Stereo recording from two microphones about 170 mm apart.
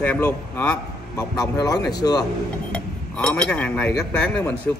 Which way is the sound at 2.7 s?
5° left (ahead or behind).